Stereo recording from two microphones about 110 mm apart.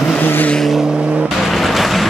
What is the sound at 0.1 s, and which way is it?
Vehicle, 15° left (ahead or behind).